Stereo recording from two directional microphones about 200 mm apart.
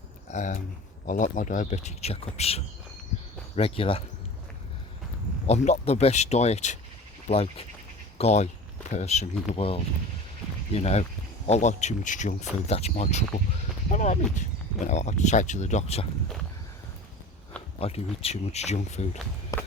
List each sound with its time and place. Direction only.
0.3 s speech: 35° left (ahead or behind)
5.5 s speech: 35° left (ahead or behind)
17.7 s speech: 30° left (ahead or behind)
19.5 s walk: 15° left (ahead or behind)